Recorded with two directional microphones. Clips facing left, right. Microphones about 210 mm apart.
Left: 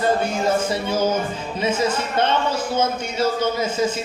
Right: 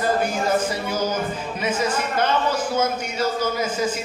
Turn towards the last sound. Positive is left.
turn(degrees=25)  # may be behind; listen again after turning